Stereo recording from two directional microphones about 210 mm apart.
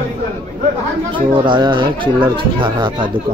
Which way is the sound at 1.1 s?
20° right (ahead or behind).